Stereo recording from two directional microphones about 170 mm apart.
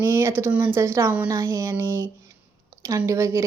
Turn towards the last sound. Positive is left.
turn(degrees=-15)  # may be behind; listen again after turning